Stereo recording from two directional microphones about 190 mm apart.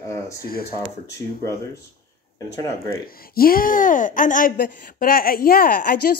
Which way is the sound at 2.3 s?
15° left (ahead or behind).